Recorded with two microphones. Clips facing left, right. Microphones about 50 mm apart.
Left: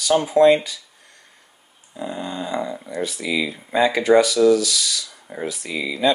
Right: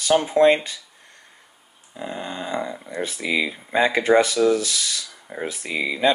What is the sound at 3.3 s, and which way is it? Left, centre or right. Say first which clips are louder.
Speech: even; centre.